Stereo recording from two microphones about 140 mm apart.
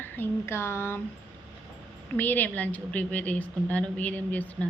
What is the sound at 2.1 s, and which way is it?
A woman's voice, 15° left (ahead or behind).